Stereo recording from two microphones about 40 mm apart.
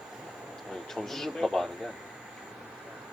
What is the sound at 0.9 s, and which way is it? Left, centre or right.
Speech, centre.